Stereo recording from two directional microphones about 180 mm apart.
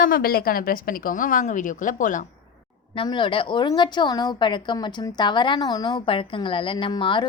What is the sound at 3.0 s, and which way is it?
A woman's voice, 30° left (ahead or behind).